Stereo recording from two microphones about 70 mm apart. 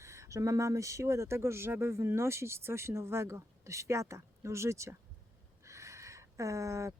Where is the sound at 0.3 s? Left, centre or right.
Right.